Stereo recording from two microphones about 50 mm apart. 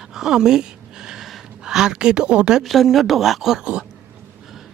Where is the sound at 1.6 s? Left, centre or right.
Centre.